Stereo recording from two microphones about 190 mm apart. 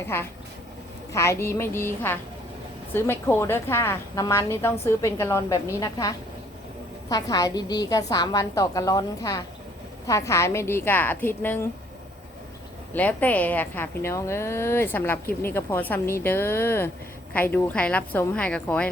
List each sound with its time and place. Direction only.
0.1 s a woman's voice: 10° left (ahead or behind)
12.9 s a woman's voice: 10° left (ahead or behind)